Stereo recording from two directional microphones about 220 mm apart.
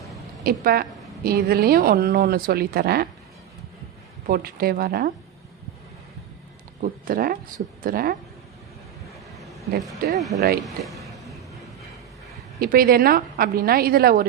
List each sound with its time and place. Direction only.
0.4 s a woman's voice: 45° right (ahead or behind)
4.3 s a woman's voice: 45° right (ahead or behind)
6.8 s speech: 40° right (ahead or behind)
10.2 s speech: centre (ahead or behind)
10.8 s a sound: centre (ahead or behind)
12.5 s a woman's voice: 40° right (ahead or behind)